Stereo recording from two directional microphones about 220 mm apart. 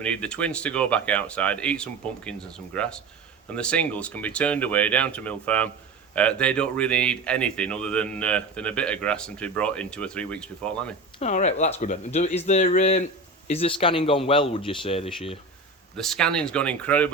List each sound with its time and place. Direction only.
0.0 s speech: 5° left (ahead or behind)
11.2 s speech: 30° left (ahead or behind)
16.0 s speech: centre (ahead or behind)